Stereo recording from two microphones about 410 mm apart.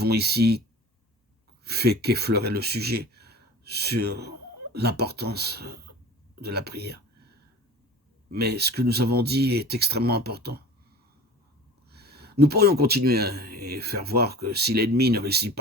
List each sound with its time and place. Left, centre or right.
0.0 s speech: right
1.6 s speech: right
8.3 s speech: right
11.9 s speech: right